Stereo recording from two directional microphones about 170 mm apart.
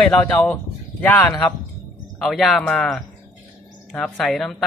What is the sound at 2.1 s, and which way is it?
Speech, centre (ahead or behind).